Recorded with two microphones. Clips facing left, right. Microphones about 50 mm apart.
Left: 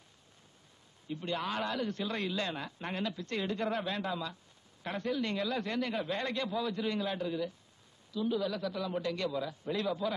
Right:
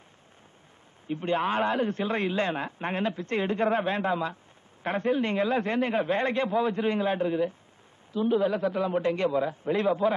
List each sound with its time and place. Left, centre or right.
1.0 s a man's voice: right